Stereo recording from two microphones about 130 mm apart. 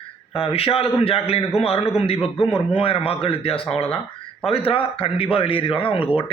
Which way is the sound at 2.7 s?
45° left (ahead or behind).